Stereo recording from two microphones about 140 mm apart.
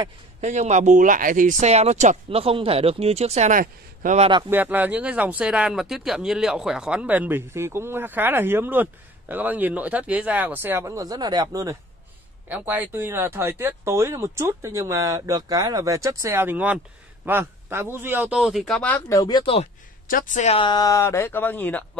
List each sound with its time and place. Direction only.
0.4 s speech: 55° right (ahead or behind)
2.2 s speech: 45° right (ahead or behind); by 4.2 s 65° right (ahead or behind)
4.5 s speech: 15° right (ahead or behind)
12.4 s speech: 10° right (ahead or behind); by 19.0 s 10° left (ahead or behind)
19.0 s speech: 25° left (ahead or behind)
20.1 s speech: 70° left (ahead or behind)
20.5 s speech: 30° left (ahead or behind); by 21.8 s 15° left (ahead or behind)